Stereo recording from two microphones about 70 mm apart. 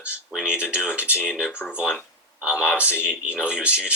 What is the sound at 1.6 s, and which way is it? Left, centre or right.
Speech, centre.